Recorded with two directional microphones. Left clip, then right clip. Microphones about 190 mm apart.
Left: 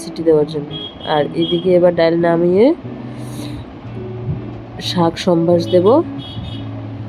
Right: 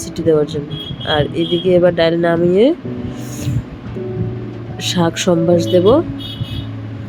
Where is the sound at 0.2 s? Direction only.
20° right (ahead or behind).